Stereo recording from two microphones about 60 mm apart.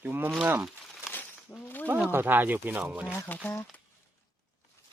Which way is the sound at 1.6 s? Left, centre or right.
Left.